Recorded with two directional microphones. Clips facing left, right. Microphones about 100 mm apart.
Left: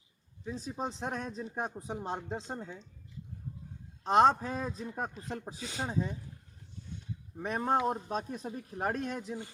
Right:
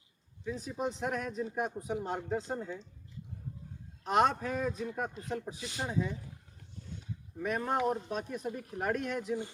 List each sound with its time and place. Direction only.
0.5 s speech: 30° left (ahead or behind)
4.0 s speech: 30° left (ahead or behind)
7.3 s speech: 30° left (ahead or behind)